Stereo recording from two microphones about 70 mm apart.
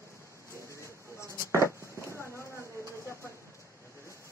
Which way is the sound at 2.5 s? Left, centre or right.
Right.